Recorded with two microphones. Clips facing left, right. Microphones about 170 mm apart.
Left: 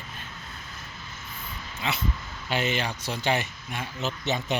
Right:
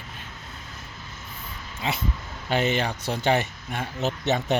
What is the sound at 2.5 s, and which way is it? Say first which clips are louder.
Speech: right 4 dB; 55° right (ahead or behind).